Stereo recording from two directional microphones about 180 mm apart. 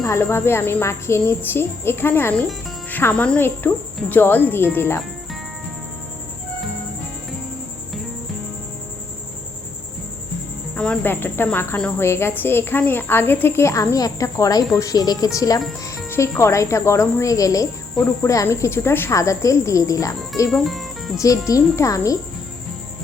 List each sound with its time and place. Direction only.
0.0 s speech: 15° left (ahead or behind)
10.8 s speech: 10° left (ahead or behind)
20.5 s speech: centre (ahead or behind)
21.2 s speech: 20° left (ahead or behind)